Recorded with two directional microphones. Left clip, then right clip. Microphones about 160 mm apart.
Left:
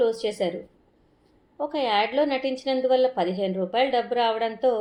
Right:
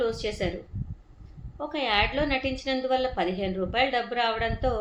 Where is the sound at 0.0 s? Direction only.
50° left (ahead or behind).